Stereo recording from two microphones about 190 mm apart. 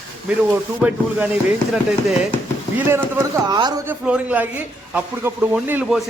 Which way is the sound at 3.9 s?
5° right (ahead or behind).